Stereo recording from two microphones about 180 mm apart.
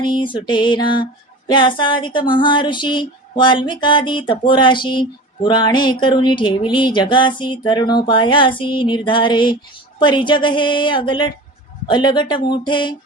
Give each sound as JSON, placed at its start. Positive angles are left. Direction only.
{"t": 0.0, "sound": "music", "side_deg": 25}